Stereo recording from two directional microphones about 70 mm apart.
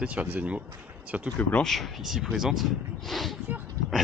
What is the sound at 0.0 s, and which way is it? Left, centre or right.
Speech, centre.